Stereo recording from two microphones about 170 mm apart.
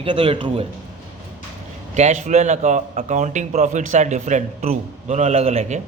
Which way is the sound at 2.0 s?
40° right (ahead or behind).